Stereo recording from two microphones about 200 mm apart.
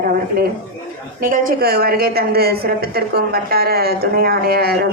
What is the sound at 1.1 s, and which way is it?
A woman's voice, 45° right (ahead or behind).